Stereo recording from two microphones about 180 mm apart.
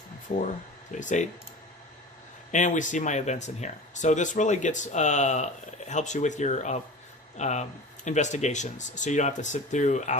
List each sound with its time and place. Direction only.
0.9 s speech: 45° left (ahead or behind)
2.5 s speech: 45° left (ahead or behind)